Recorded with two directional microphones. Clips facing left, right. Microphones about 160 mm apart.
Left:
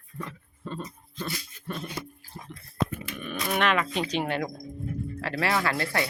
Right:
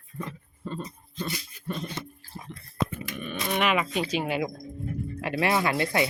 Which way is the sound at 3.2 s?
Centre (ahead or behind).